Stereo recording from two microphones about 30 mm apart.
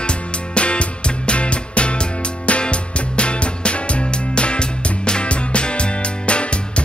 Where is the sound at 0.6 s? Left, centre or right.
Left.